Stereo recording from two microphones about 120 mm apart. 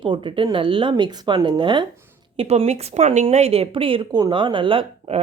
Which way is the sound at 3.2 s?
60° right (ahead or behind).